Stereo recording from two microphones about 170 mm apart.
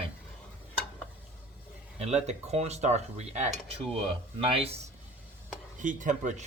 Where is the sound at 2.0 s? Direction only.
40° right (ahead or behind).